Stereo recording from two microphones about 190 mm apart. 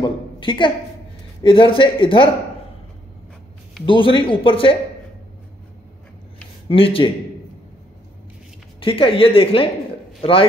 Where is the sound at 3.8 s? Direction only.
25° left (ahead or behind).